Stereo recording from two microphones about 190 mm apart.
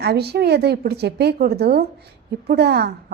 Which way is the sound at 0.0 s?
60° right (ahead or behind).